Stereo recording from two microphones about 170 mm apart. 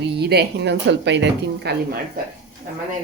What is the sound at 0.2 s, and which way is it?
Speech, 70° right (ahead or behind).